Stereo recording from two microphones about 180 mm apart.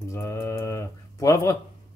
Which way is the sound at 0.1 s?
15° left (ahead or behind).